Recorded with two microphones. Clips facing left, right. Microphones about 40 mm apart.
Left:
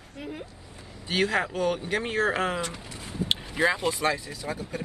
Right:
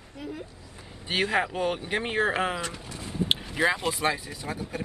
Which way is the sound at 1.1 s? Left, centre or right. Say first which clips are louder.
Even; centre.